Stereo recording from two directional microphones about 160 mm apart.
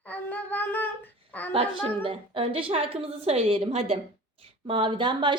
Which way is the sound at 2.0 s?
35° right (ahead or behind).